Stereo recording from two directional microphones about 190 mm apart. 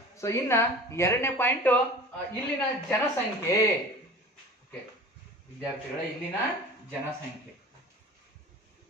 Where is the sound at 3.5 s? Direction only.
20° left (ahead or behind).